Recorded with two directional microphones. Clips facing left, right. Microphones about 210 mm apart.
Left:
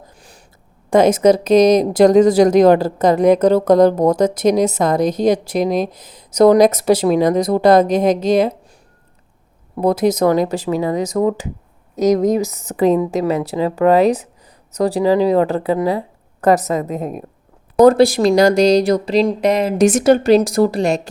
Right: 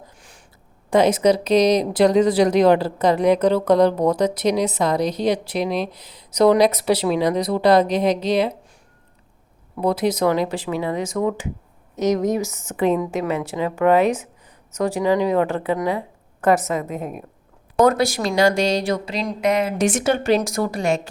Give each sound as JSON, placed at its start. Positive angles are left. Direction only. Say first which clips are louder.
{"t": 0.2, "sound": "a sound", "louder": "left 4 dB", "side_deg": 35}
{"t": 0.9, "sound": "speech", "louder": "left 4 dB", "side_deg": 45}
{"t": 9.7, "sound": "speech", "louder": "left 5 dB", "side_deg": 45}